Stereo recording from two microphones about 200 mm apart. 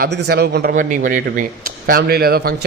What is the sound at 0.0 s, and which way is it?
Speech, 55° right (ahead or behind).